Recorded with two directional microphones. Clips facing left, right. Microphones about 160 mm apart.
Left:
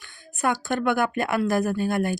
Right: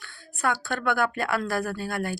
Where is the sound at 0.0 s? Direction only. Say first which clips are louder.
Left 2 dB; 15° left (ahead or behind).